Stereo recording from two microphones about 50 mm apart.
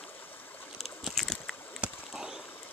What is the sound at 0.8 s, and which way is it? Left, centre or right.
Boat, centre.